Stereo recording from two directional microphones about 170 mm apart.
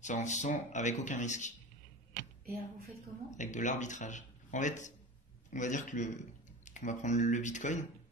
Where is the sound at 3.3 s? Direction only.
45° left (ahead or behind).